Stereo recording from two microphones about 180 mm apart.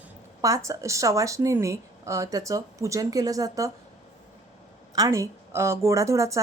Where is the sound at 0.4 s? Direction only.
15° right (ahead or behind).